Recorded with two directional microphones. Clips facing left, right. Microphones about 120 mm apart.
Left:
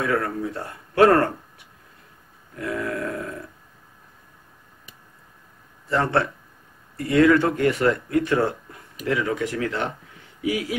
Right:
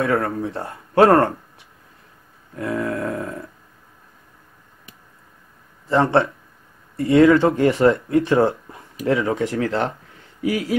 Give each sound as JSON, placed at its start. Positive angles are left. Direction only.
{"t": 0.1, "sound": "speech", "side_deg": -30}
{"t": 2.6, "sound": "speech", "side_deg": -30}
{"t": 5.9, "sound": "speech", "side_deg": -25}